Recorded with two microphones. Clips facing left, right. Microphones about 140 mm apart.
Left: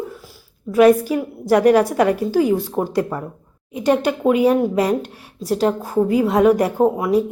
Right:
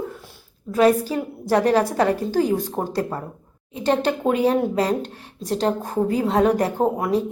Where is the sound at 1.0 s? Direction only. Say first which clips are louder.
Left 4 dB; 10° left (ahead or behind).